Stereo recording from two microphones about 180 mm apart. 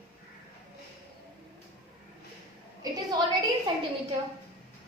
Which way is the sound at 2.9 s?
20° right (ahead or behind).